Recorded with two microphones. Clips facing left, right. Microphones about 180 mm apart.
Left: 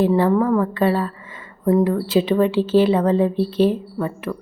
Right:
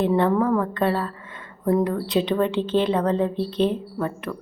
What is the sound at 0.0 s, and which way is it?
A woman's voice, 5° left (ahead or behind).